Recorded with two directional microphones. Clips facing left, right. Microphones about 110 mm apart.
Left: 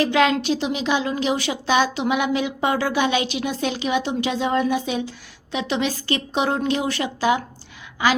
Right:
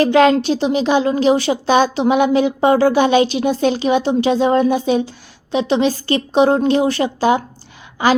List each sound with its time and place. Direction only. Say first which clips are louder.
0.0 s a woman's voice: right 7 dB; 40° right (ahead or behind)